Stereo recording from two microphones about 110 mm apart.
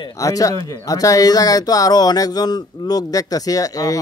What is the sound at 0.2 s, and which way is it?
Speech, 30° left (ahead or behind).